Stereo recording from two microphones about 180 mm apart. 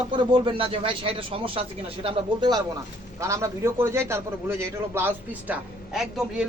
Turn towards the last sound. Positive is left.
turn(degrees=-5)  # may be behind; listen again after turning